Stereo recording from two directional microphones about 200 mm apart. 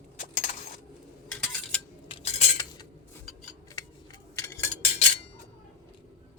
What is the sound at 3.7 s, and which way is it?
Scissors, 15° left (ahead or behind).